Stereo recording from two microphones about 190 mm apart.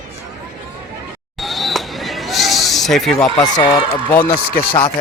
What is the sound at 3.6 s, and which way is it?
Speech, 30° left (ahead or behind).